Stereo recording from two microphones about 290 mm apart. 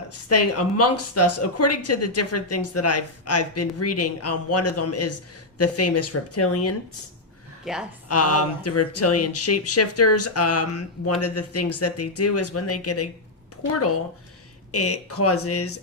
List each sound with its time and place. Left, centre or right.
0.3 s speech: left
7.6 s a woman's voice: centre
8.0 s speech: left
14.7 s speech: left